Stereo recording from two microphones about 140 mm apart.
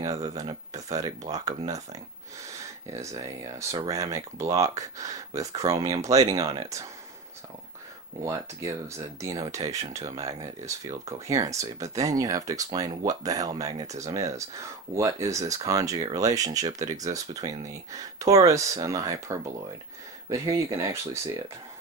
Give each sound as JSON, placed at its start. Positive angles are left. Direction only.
{"t": 0.0, "sound": "speech", "side_deg": -25}
{"t": 2.9, "sound": "speech", "side_deg": -25}
{"t": 8.2, "sound": "speech", "side_deg": -25}